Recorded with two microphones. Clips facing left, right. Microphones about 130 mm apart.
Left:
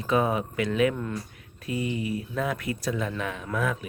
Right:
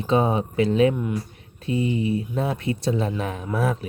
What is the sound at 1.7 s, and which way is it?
Speech, 25° right (ahead or behind).